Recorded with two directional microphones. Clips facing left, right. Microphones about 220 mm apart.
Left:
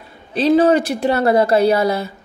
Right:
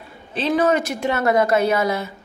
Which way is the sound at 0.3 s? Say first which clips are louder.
Left 6 dB; 35° left (ahead or behind).